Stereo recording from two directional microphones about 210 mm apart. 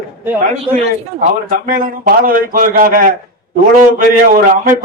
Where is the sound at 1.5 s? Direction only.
40° right (ahead or behind).